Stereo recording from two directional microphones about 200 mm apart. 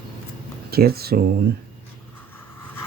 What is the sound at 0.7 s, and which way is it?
Speech, 50° right (ahead or behind).